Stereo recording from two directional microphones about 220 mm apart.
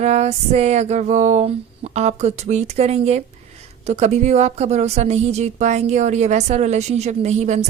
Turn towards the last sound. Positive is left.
turn(degrees=-30)  # may be behind; listen again after turning